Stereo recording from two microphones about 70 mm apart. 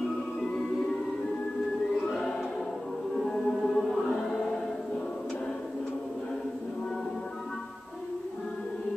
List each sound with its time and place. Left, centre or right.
2.0 s choir: centre
3.2 s music: centre